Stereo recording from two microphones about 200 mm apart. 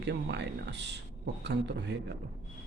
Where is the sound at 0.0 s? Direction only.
60° right (ahead or behind).